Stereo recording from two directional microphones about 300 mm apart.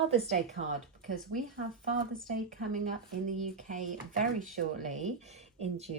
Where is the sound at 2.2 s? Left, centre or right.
Right.